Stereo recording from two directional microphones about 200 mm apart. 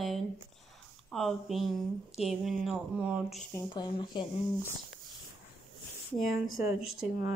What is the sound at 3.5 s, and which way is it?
Speech, 20° left (ahead or behind).